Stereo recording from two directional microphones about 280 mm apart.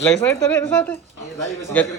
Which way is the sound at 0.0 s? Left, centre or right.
Centre.